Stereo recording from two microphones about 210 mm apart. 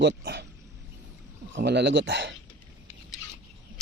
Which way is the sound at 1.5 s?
55° right (ahead or behind).